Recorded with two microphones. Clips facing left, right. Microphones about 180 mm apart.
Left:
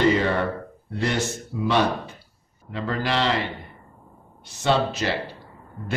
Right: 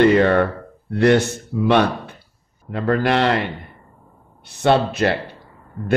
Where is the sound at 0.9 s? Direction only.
60° right (ahead or behind).